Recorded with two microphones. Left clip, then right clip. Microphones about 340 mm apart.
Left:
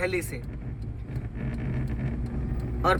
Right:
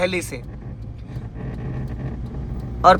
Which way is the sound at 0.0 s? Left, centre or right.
Centre.